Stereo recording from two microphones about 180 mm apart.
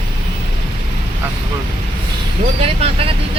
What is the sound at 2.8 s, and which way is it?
Speech, 30° right (ahead or behind).